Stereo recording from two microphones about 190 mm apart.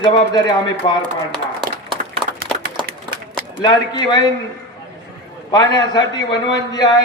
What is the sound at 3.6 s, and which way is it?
Speech, 20° left (ahead or behind).